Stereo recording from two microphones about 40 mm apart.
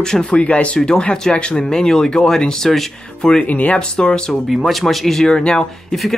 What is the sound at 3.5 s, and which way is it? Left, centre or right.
Speech, left.